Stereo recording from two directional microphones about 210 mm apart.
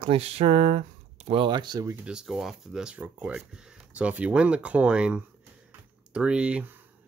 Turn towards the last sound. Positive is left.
turn(degrees=-5)  # may be behind; listen again after turning